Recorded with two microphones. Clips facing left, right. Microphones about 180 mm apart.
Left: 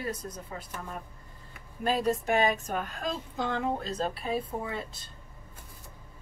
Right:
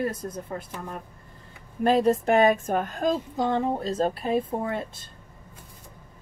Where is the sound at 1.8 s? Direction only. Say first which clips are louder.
Right 7 dB; 60° right (ahead or behind); by 3.9 s 35° right (ahead or behind).